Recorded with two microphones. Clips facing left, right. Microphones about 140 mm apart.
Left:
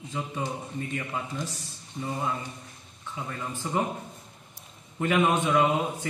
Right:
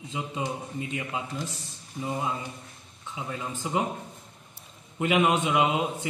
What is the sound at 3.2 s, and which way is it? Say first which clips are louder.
Speech: right 1 dB; 15° right (ahead or behind).